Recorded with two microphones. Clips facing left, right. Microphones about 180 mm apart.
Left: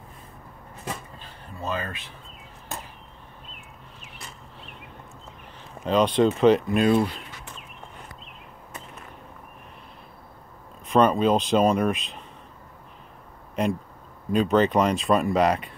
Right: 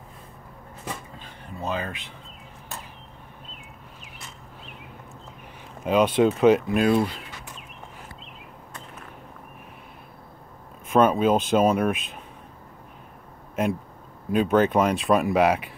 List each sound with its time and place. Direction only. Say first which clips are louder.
1.6 s speech: right 1 dB; 15° right (ahead or behind)
5.9 s speech: right 1 dB; 10° right (ahead or behind)
10.9 s speech: even; 5° right (ahead or behind)
14.3 s speech: even; 5° right (ahead or behind)